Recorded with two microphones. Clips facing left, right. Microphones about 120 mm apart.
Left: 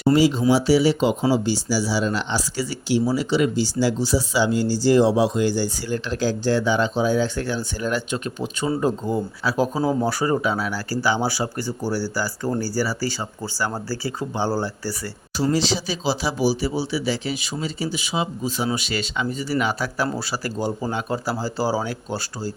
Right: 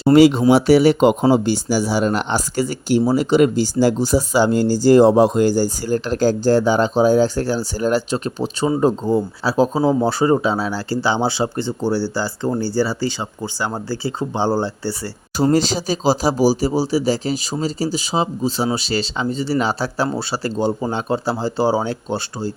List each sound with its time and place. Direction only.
0.1 s speech: 65° right (ahead or behind); by 14.9 s 25° right (ahead or behind)
15.4 s speech: 45° right (ahead or behind); by 22.5 s 25° right (ahead or behind)